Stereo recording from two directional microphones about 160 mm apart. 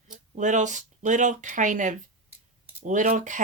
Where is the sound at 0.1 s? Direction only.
50° right (ahead or behind).